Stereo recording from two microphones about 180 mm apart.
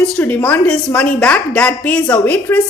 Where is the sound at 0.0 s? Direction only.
5° left (ahead or behind).